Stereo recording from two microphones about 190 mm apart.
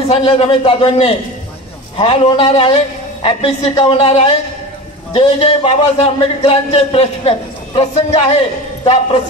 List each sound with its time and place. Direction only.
0.0 s a man's voice: 30° left (ahead or behind)